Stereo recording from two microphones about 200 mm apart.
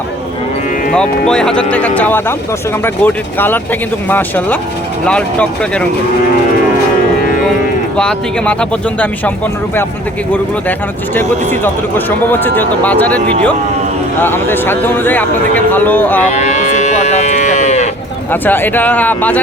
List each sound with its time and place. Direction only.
0.9 s speech: 5° left (ahead or behind)
7.9 s speech: 5° left (ahead or behind)
10.3 s speech: 10° left (ahead or behind)
16.3 s livestock: 35° left (ahead or behind)
18.3 s speech: 10° left (ahead or behind)